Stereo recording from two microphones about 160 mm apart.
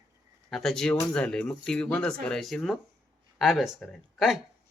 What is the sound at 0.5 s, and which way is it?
Speech, centre (ahead or behind).